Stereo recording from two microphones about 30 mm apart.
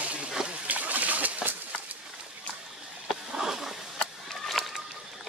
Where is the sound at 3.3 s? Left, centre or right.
Centre.